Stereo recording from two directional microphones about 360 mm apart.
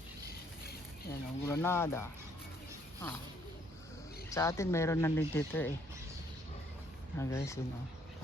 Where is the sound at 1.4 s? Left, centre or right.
Centre.